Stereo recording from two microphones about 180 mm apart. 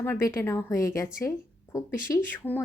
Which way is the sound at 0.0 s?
15° left (ahead or behind).